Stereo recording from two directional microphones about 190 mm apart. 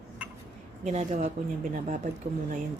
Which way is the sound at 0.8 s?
40° right (ahead or behind).